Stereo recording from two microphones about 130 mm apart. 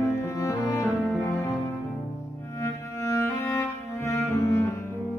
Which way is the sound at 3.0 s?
20° left (ahead or behind).